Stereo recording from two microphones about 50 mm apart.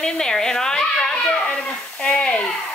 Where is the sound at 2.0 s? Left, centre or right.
Centre.